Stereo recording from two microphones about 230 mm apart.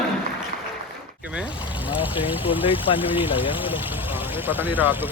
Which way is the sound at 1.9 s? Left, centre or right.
Left.